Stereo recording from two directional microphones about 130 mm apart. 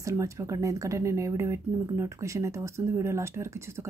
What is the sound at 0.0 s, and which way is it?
Speech, 25° right (ahead or behind).